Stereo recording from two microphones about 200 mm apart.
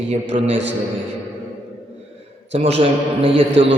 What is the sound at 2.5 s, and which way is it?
Speech, 30° right (ahead or behind).